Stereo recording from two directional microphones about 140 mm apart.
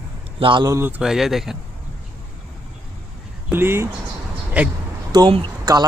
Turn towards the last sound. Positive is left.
turn(degrees=-30)  # may be behind; listen again after turning